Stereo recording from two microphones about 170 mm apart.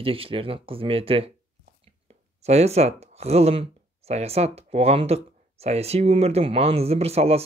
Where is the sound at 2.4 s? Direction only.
40° right (ahead or behind).